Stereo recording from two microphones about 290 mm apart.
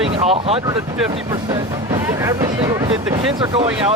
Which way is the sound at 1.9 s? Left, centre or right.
Centre.